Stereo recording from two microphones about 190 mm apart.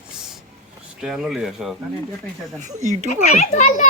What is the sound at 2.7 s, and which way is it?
Speech, 40° right (ahead or behind).